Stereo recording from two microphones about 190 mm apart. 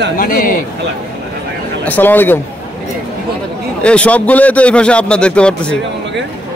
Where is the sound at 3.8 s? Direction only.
5° left (ahead or behind).